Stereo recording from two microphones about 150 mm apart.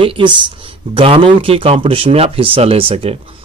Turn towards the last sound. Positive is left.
turn(degrees=-40)  # may be behind; listen again after turning